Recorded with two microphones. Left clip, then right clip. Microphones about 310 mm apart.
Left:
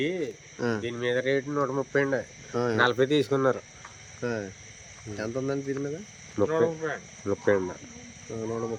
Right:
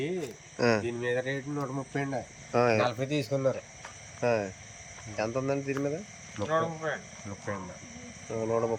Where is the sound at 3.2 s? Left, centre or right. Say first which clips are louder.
Left 4 dB; left.